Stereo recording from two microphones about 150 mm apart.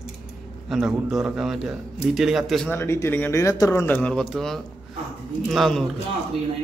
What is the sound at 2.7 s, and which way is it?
A man's voice, 15° left (ahead or behind).